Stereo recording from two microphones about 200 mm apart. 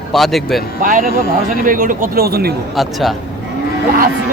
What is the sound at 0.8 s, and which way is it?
A man's voice, 40° right (ahead or behind).